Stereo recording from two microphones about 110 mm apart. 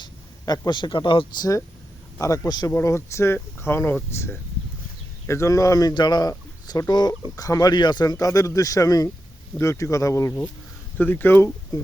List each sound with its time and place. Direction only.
0.0 s speech: 35° left (ahead or behind)
2.1 s speech: 25° left (ahead or behind)
2.7 s speech: 25° left (ahead or behind)
10.9 s speech: 15° left (ahead or behind)